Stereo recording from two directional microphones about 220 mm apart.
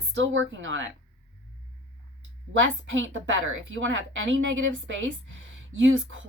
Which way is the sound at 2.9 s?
60° right (ahead or behind).